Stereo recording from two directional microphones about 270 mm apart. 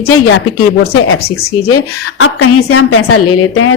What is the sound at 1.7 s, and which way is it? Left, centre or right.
A woman's voice, left.